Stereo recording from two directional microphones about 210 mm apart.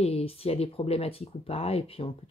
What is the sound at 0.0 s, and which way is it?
Speech, 30° left (ahead or behind).